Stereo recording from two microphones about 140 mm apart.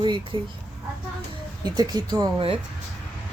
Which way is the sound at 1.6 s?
30° right (ahead or behind).